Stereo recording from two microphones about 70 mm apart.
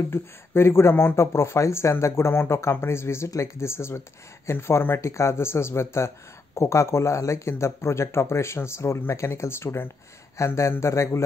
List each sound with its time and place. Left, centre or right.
0.1 s a man's voice: left